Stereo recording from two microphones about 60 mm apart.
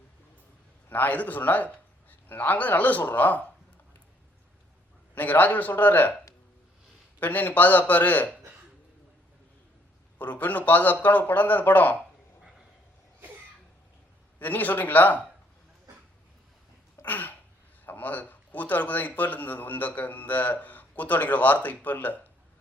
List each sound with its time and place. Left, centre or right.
0.9 s speech: left
5.1 s speech: left
7.2 s speech: left
10.2 s speech: left
12.4 s a sound: centre
14.3 s speech: left
17.0 s a sound: left
17.8 s speech: left